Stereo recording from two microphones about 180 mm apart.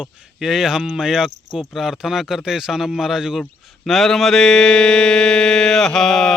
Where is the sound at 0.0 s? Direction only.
Centre (ahead or behind).